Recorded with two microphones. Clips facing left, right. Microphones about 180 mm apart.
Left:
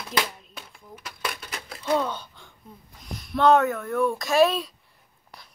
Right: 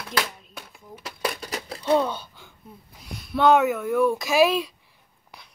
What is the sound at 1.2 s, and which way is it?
Crumpling, 35° right (ahead or behind).